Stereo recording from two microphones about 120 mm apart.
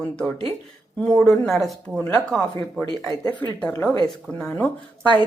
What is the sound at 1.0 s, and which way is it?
A woman's voice, 10° left (ahead or behind).